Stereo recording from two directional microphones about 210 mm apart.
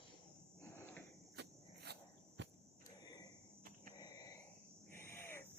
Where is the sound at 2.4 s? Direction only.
55° right (ahead or behind).